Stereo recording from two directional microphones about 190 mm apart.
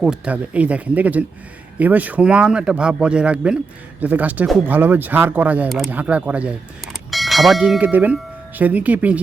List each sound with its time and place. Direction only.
0.0 s speech: 5° right (ahead or behind)